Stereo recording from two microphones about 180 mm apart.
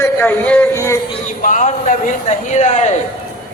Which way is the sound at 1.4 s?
45° left (ahead or behind).